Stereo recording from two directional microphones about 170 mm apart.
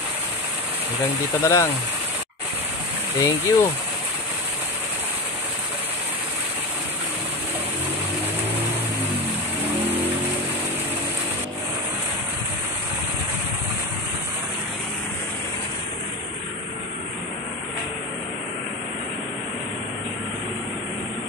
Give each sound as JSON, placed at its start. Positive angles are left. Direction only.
{"t": 1.4, "sound": "speech", "side_deg": 20}
{"t": 3.2, "sound": "speech", "side_deg": 15}